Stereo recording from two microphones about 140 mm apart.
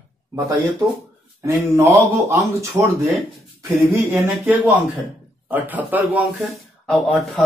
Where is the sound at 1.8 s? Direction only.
20° right (ahead or behind).